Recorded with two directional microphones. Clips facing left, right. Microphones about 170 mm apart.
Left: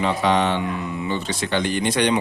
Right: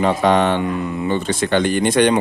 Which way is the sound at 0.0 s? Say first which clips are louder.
Right 4 dB; 50° right (ahead or behind).